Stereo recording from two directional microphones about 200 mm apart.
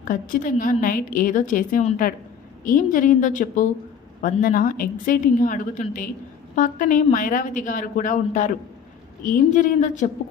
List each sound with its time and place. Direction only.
0.0 s a woman's voice: 40° left (ahead or behind)